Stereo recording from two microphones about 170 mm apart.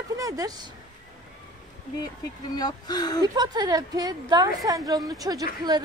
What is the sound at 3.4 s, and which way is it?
A woman's voice, 25° right (ahead or behind).